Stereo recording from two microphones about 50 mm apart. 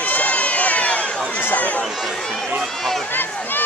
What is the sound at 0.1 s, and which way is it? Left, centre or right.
Run, left.